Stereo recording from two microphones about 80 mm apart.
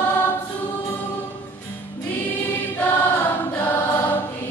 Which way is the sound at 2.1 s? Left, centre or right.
Left.